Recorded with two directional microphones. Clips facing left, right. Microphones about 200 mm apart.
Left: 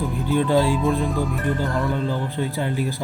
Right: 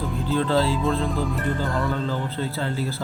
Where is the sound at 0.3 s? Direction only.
15° left (ahead or behind).